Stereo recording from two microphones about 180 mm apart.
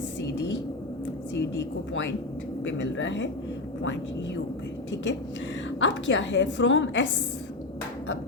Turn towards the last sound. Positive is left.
turn(degrees=90)